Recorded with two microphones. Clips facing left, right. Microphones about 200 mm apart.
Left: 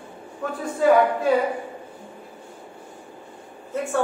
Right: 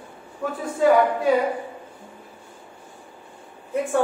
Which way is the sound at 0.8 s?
Centre (ahead or behind).